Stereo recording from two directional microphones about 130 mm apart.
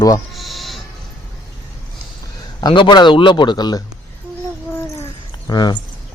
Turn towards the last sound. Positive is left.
turn(degrees=30)  # may be behind; listen again after turning